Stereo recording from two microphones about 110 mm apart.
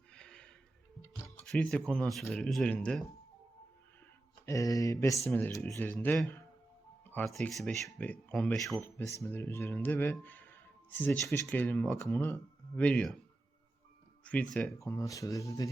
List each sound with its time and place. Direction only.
0.1 s a sound: 10° left (ahead or behind)
1.5 s speech: 5° left (ahead or behind)
4.4 s speech: 30° left (ahead or behind)
5.7 s speech: 15° left (ahead or behind)
7.0 s music: 15° left (ahead or behind)
7.3 s speech: centre (ahead or behind)
7.9 s speech: 15° left (ahead or behind)
9.1 s speech: 20° left (ahead or behind)
14.3 s speech: 10° left (ahead or behind)
14.8 s speech: 25° left (ahead or behind)